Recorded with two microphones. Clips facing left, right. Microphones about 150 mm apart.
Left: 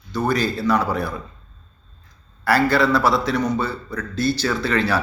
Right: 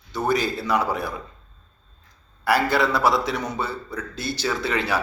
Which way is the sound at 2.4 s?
20° right (ahead or behind).